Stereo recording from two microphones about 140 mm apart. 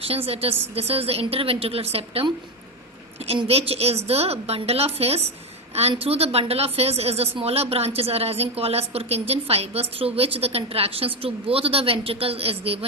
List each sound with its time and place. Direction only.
0.8 s a woman's voice: 45° right (ahead or behind)